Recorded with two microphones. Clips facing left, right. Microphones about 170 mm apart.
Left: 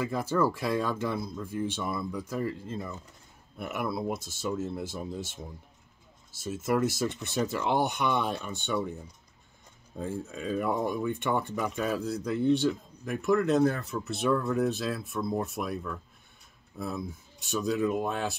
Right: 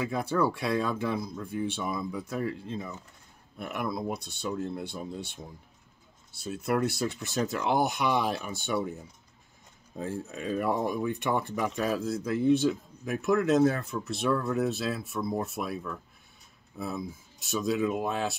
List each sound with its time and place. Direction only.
0.0 s speech: centre (ahead or behind)